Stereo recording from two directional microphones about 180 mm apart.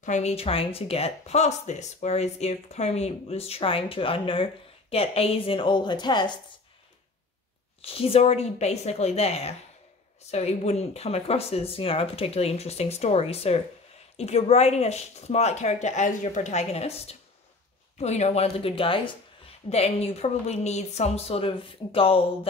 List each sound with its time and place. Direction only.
0.0 s speech: 40° left (ahead or behind); by 6.3 s 25° left (ahead or behind)
7.8 s speech: 30° left (ahead or behind)